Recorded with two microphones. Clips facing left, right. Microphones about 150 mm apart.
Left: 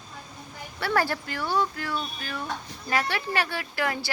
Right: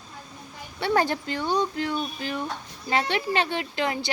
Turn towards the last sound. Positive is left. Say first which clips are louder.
# right 2 dB
turn(degrees=-20)  # may be behind; listen again after turning